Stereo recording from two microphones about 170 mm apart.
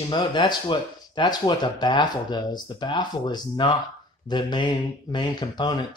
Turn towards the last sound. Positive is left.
turn(degrees=25)  # may be behind; listen again after turning